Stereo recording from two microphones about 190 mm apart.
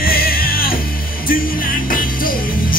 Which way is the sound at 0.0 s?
50° left (ahead or behind).